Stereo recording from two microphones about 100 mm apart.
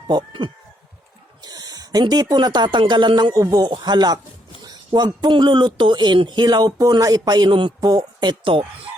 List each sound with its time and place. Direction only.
0.1 s a man's voice: 45° right (ahead or behind)
3.3 s a man's voice: 35° right (ahead or behind)
7.8 s a man's voice: 40° right (ahead or behind)